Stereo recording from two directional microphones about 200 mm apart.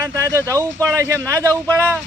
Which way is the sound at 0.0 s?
15° right (ahead or behind).